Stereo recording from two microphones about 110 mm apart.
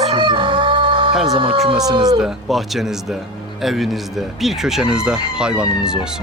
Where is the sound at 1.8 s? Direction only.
35° right (ahead or behind).